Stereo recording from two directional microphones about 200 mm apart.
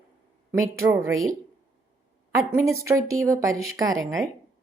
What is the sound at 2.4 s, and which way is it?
A woman's voice, 15° right (ahead or behind).